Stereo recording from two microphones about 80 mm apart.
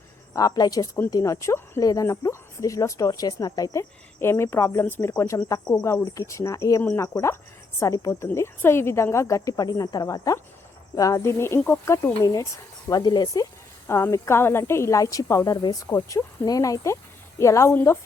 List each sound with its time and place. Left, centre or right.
0.3 s speech: left
1.1 s a woman's voice: left
1.8 s speech: left
3.8 s a woman's voice: left
6.1 s a woman's voice: left
12.2 s speech: left
13.8 s a woman's voice: left
16.0 s a woman's voice: left
17.7 s a woman's voice: left